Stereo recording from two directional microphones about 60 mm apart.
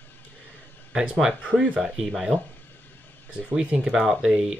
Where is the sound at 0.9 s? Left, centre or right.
Centre.